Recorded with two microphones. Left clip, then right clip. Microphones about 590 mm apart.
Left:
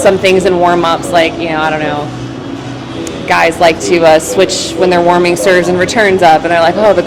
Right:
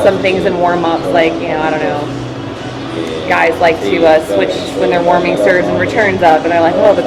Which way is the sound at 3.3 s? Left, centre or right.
Left.